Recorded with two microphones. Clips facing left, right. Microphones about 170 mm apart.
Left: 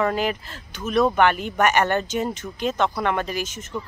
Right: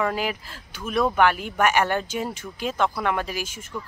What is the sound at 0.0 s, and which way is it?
Speech, 5° right (ahead or behind).